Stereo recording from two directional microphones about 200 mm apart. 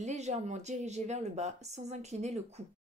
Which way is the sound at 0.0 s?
35° right (ahead or behind).